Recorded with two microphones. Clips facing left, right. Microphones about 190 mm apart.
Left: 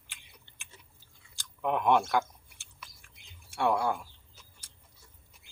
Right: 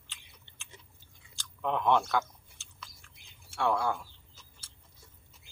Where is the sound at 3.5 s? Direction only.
15° left (ahead or behind).